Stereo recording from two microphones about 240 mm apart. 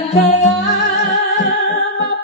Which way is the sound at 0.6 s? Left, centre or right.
Left.